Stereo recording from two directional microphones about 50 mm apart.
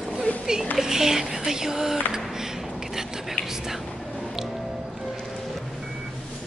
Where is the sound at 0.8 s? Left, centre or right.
Centre.